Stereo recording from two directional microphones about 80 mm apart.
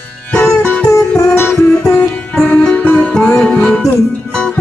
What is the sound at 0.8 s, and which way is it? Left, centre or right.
Music, left.